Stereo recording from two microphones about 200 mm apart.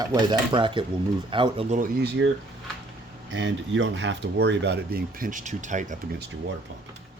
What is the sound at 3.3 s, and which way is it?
Speech, 65° right (ahead or behind).